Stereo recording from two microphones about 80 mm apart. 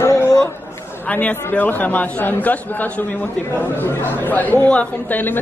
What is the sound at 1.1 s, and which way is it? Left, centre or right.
Speech, centre.